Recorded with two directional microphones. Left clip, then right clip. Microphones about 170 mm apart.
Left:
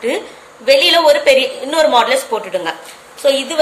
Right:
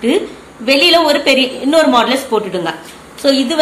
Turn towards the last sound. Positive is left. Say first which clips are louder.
# right 1 dB
turn(degrees=20)  # may be behind; listen again after turning